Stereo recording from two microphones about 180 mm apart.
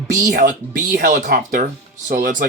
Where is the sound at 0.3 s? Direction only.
45° right (ahead or behind).